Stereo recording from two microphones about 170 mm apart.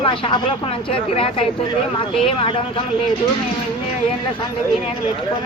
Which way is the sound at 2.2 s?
30° left (ahead or behind).